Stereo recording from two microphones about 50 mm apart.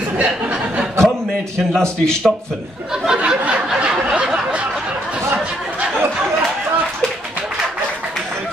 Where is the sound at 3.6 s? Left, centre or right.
Centre.